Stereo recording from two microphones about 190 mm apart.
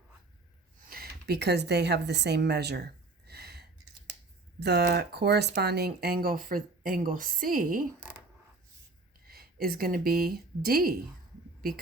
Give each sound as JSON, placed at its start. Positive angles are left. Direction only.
{"t": 0.9, "sound": "a sound", "side_deg": -55}
{"t": 4.6, "sound": "speech", "side_deg": -60}
{"t": 9.2, "sound": "speech", "side_deg": -50}